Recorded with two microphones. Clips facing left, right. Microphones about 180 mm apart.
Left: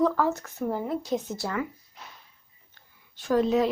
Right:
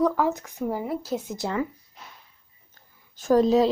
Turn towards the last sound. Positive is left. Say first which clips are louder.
# right 4 dB
turn(degrees=-35)  # may be behind; listen again after turning